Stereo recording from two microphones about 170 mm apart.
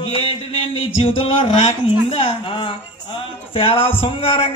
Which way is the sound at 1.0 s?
30° left (ahead or behind).